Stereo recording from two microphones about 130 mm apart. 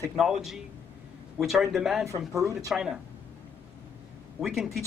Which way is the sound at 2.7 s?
5° right (ahead or behind).